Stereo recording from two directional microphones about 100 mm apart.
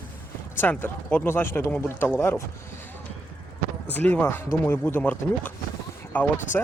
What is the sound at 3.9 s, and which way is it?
Speech, 15° left (ahead or behind).